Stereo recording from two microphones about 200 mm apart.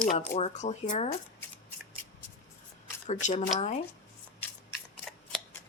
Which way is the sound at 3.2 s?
35° left (ahead or behind).